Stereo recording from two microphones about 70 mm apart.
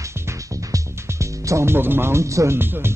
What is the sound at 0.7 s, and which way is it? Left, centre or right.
Speech, right.